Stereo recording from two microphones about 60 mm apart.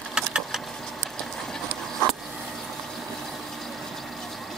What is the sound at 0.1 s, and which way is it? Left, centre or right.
Vehicle, centre.